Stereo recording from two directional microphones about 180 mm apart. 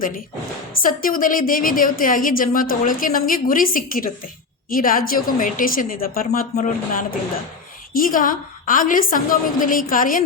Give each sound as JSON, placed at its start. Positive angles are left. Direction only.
{"t": 0.8, "sound": "a woman's voice", "side_deg": 50}